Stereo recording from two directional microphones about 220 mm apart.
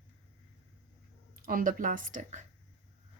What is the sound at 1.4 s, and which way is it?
A woman's voice, 40° right (ahead or behind).